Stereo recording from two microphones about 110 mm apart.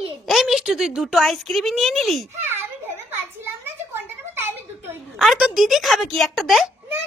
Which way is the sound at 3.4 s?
20° right (ahead or behind).